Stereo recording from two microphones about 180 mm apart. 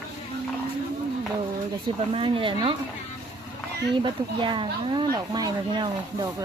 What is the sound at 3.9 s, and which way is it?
Speech, 25° right (ahead or behind).